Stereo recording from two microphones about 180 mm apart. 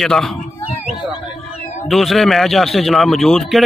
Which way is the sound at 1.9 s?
Centre (ahead or behind).